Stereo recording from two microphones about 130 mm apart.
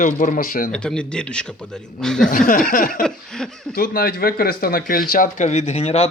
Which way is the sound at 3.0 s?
5° left (ahead or behind).